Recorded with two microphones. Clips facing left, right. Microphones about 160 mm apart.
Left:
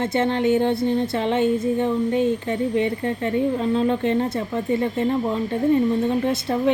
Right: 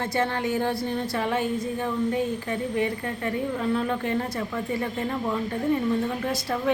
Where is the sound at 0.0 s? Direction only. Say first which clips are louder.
Left 6 dB; 25° left (ahead or behind).